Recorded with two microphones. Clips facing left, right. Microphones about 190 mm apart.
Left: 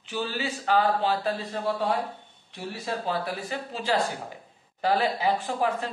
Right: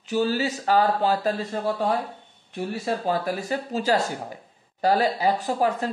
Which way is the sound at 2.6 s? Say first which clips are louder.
Right 5 dB; 45° right (ahead or behind).